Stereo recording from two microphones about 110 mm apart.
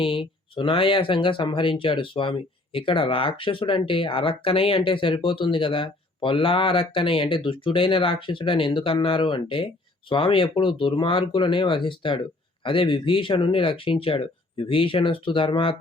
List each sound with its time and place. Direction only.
0.0 s speech: 50° left (ahead or behind)